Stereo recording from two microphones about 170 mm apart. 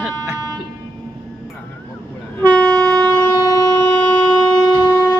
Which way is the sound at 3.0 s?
10° left (ahead or behind).